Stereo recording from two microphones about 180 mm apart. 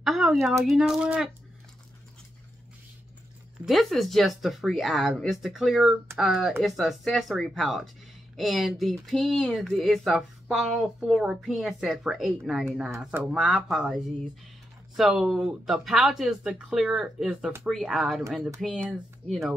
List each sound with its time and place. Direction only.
0.0 s speech: centre (ahead or behind)
3.6 s speech: centre (ahead or behind)